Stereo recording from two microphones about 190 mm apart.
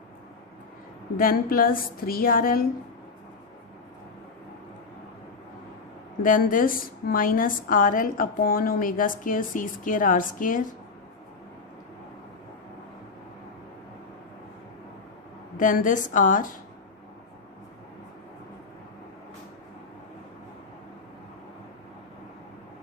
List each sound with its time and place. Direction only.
1.1 s a woman's voice: 50° left (ahead or behind)
6.2 s a woman's voice: 45° left (ahead or behind)
15.5 s a woman's voice: 45° left (ahead or behind)